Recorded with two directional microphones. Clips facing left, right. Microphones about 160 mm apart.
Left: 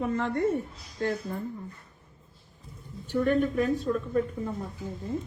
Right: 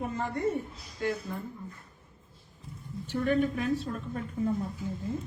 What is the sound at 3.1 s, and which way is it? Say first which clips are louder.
Speech: left 2 dB; 50° left (ahead or behind).